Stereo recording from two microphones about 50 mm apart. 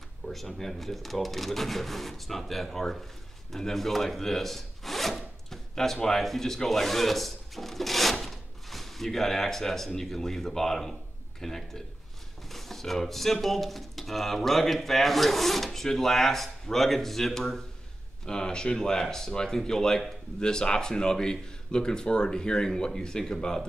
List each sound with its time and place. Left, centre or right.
0.5 s speech: centre
3.5 s wood: centre
11.4 s speech: centre